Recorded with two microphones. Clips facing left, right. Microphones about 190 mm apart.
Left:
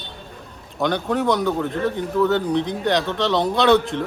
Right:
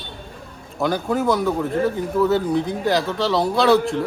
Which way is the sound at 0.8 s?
5° right (ahead or behind).